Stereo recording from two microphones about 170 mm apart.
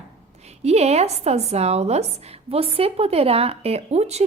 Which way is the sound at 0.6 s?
40° right (ahead or behind).